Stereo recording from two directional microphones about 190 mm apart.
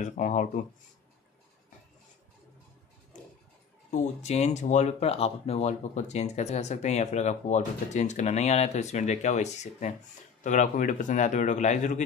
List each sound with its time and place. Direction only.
0.0 s speech: 40° left (ahead or behind)
3.9 s speech: 35° left (ahead or behind)